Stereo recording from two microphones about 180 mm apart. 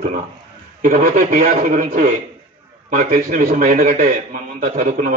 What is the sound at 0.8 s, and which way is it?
A man's voice, 45° right (ahead or behind).